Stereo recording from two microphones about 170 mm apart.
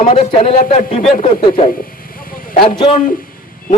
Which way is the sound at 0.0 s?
35° left (ahead or behind).